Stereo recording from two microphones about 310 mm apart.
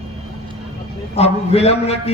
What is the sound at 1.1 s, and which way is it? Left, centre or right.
A man's voice, centre.